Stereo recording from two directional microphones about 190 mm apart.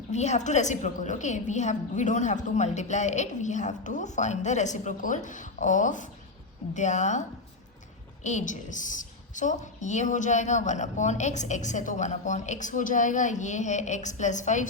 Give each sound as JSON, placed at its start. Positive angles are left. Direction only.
{"t": 0.1, "sound": "a woman's voice", "side_deg": 35}